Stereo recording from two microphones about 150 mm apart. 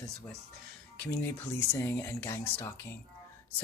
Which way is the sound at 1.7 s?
15° left (ahead or behind).